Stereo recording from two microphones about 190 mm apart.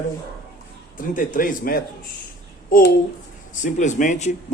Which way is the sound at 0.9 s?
45° left (ahead or behind).